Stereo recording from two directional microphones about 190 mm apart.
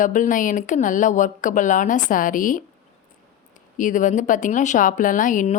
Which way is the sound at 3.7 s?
40° left (ahead or behind).